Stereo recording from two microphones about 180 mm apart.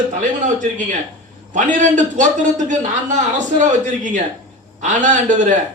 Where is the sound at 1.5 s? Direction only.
45° right (ahead or behind).